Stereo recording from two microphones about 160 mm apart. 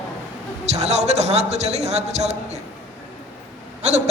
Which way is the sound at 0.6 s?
45° right (ahead or behind).